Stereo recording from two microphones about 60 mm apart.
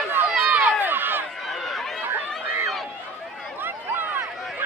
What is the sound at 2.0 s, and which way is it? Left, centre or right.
Chatter, right.